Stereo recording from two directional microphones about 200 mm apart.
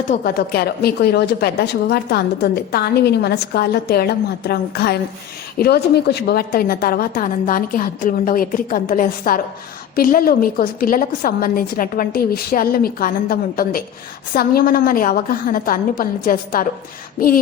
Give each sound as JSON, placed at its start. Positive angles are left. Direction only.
{"t": 0.1, "sound": "a woman's voice", "side_deg": 50}